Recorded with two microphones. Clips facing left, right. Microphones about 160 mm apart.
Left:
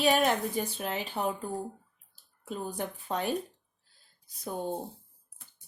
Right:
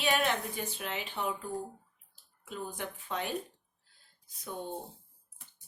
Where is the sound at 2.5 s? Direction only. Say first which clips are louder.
Left 4 dB; 35° left (ahead or behind).